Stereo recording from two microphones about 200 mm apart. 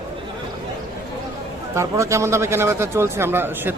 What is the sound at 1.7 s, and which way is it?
A man's voice, 15° right (ahead or behind).